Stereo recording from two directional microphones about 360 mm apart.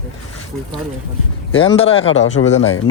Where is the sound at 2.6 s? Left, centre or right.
Left.